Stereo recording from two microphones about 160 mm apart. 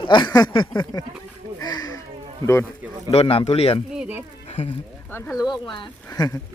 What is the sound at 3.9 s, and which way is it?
Speech, 5° right (ahead or behind).